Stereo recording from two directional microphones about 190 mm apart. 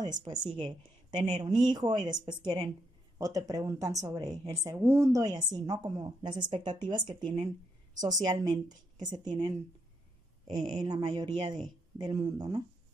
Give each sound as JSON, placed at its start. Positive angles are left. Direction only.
{"t": 0.0, "sound": "a woman's voice", "side_deg": -20}
{"t": 6.5, "sound": "speech", "side_deg": -40}
{"t": 6.8, "sound": "speech", "side_deg": -25}
{"t": 10.8, "sound": "speech", "side_deg": -20}